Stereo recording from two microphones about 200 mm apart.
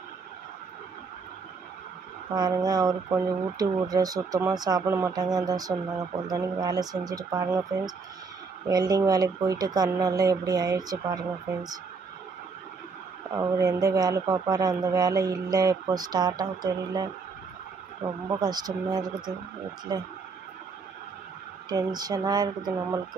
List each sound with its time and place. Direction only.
2.3 s a man's voice: 20° right (ahead or behind)
13.4 s a man's voice: 15° right (ahead or behind)
21.6 s a man's voice: 20° right (ahead or behind)